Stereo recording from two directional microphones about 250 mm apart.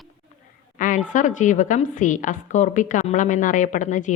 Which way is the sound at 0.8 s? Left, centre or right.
Left.